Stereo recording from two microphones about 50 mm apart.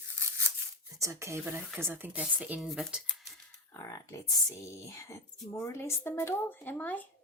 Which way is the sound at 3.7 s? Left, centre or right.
Left.